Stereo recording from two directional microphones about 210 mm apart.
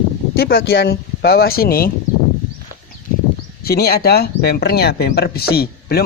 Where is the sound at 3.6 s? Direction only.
50° left (ahead or behind).